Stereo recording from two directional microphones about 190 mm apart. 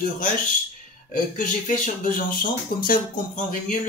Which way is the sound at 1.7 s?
45° left (ahead or behind).